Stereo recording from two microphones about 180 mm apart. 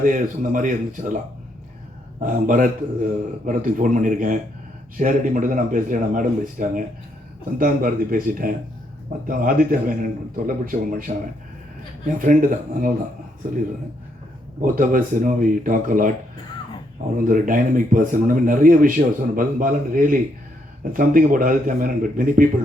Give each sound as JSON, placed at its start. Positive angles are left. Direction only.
{"t": 0.0, "sound": "a man's voice", "side_deg": -45}
{"t": 2.2, "sound": "a man's voice", "side_deg": -45}
{"t": 14.6, "sound": "a man's voice", "side_deg": -45}
{"t": 17.2, "sound": "a man's voice", "side_deg": -50}